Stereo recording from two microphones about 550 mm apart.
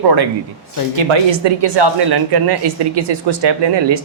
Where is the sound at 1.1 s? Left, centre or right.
Right.